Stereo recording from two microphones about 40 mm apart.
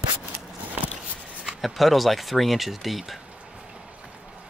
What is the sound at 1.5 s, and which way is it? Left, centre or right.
Speech, centre.